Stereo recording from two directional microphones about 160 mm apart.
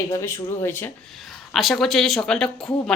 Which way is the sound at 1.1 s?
Centre (ahead or behind).